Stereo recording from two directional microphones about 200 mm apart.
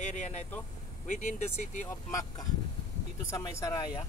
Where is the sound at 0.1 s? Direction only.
35° left (ahead or behind).